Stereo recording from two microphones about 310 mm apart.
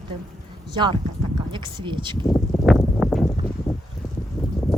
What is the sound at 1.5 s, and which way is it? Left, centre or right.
Speech, centre.